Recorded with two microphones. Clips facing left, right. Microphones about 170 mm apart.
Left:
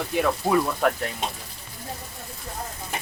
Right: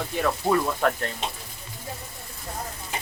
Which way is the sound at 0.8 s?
5° left (ahead or behind).